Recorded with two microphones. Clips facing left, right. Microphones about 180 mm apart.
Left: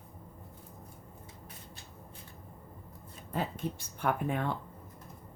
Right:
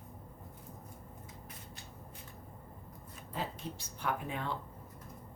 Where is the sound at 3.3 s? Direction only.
55° left (ahead or behind).